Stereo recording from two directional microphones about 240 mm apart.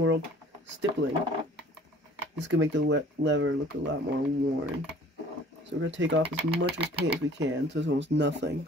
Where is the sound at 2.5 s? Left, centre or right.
Right.